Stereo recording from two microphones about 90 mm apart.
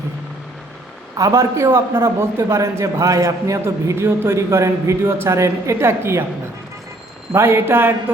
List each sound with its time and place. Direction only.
1.1 s a man's voice: 35° right (ahead or behind)
7.3 s speech: 30° right (ahead or behind)